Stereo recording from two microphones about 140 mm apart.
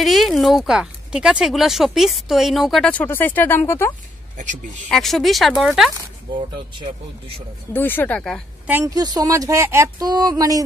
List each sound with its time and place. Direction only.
0.0 s speech: centre (ahead or behind)
2.9 s speech: 15° left (ahead or behind)
4.8 s speech: 5° left (ahead or behind)
6.3 s speech: 40° right (ahead or behind)
7.7 s speech: 15° left (ahead or behind)
8.6 s a woman's voice: 15° right (ahead or behind)
8.9 s speech: 25° right (ahead or behind)